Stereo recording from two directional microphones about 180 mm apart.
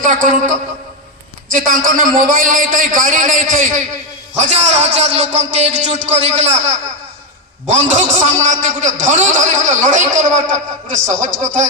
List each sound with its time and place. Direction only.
0.0 s a man's voice: 45° right (ahead or behind)